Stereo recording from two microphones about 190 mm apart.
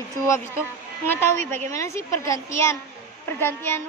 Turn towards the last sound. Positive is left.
turn(degrees=10)  # may be behind; listen again after turning